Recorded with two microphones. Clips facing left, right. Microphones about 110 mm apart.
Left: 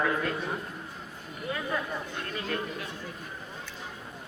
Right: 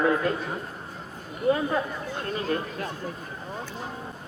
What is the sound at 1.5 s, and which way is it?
Speech, 30° right (ahead or behind).